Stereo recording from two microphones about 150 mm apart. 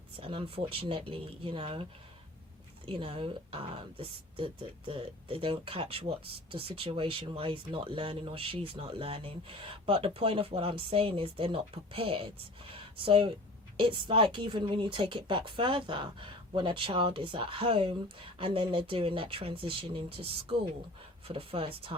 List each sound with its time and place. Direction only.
0.2 s speech: 35° right (ahead or behind)